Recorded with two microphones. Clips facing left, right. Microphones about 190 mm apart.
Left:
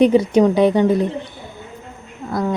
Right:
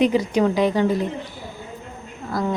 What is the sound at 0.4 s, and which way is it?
Speech, 20° left (ahead or behind).